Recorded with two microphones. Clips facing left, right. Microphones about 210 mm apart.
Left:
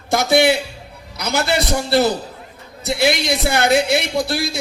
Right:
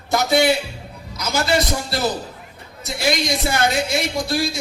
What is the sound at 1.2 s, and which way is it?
A woman's voice, 65° left (ahead or behind).